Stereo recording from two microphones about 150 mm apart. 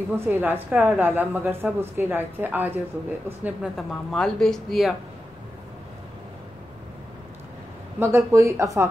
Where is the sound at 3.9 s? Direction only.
5° left (ahead or behind).